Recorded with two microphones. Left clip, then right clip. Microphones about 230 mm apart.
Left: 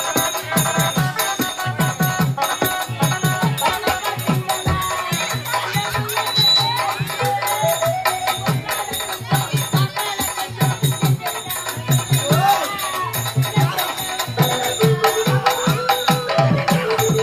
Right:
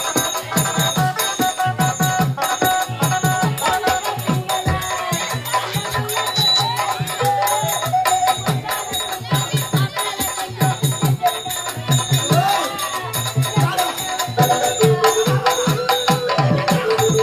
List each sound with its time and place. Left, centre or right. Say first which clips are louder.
0.1 s music: left 2 dB; centre
6.1 s music: left 1 dB; centre
8.0 s music: right 3 dB; centre
12.1 s music: even; centre
14.2 s music: right 5 dB; centre